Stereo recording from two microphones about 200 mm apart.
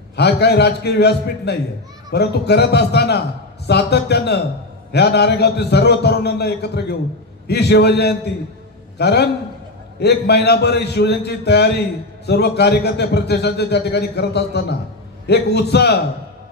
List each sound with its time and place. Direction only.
0.1 s a man's voice: 55° left (ahead or behind)